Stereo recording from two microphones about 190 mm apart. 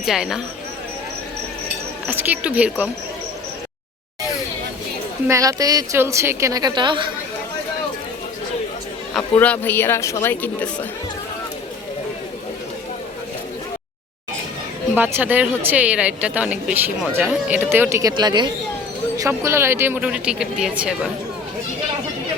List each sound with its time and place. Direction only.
0.0 s speech: centre (ahead or behind)
2.0 s speech: 10° right (ahead or behind)
5.3 s speech: 15° right (ahead or behind)
9.4 s speech: 10° left (ahead or behind)
14.9 s speech: 10° right (ahead or behind)